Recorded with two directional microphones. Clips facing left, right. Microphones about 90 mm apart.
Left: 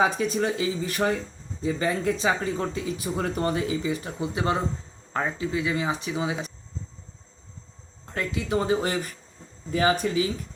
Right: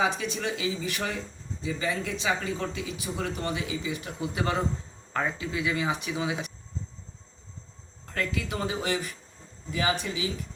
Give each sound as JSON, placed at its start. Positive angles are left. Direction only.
{"t": 0.0, "sound": "speech", "side_deg": 45}
{"t": 8.0, "sound": "speech", "side_deg": 25}